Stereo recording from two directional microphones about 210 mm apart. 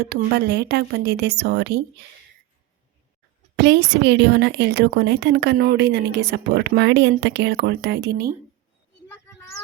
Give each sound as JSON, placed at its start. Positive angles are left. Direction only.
{"t": 0.0, "sound": "speech", "side_deg": -50}
{"t": 3.5, "sound": "a woman's voice", "side_deg": -55}
{"t": 9.0, "sound": "a sound", "side_deg": 10}